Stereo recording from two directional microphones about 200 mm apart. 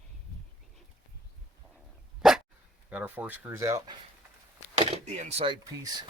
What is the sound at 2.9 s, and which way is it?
Speech, 10° right (ahead or behind).